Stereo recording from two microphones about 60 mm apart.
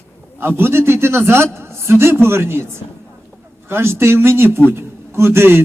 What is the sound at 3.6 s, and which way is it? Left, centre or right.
A man's voice, right.